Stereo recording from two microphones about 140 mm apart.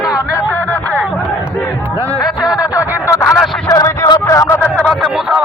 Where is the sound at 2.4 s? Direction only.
25° left (ahead or behind).